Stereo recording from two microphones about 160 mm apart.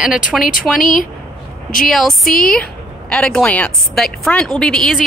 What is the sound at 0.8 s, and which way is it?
Speech, 55° left (ahead or behind).